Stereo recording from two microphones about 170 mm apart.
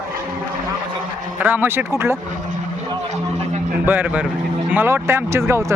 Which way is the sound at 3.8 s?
10° right (ahead or behind).